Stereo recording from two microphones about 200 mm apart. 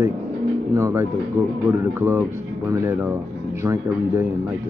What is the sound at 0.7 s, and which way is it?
Speech, 15° right (ahead or behind).